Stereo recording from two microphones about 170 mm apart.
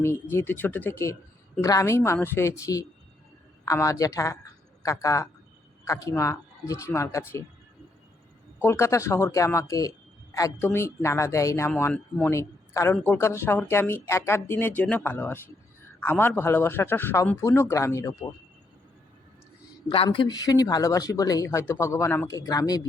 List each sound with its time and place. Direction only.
0.0 s speech: 15° left (ahead or behind)
8.5 s speech: 15° left (ahead or behind)
20.1 s speech: 25° left (ahead or behind)